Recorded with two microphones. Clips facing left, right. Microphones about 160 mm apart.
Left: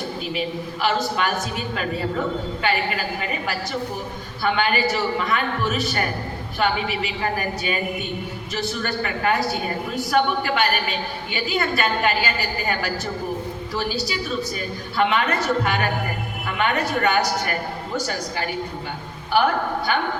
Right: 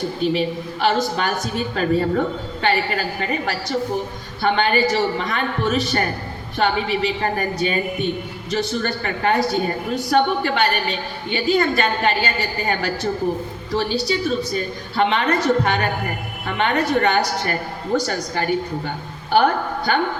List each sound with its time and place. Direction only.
0.3 s a woman's voice: 35° right (ahead or behind)
4.4 s a woman's voice: 35° right (ahead or behind)